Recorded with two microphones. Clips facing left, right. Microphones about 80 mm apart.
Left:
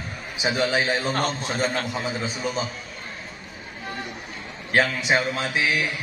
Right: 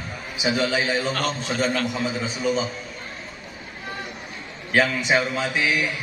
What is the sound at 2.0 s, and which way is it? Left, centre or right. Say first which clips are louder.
Music: right 3 dB; centre.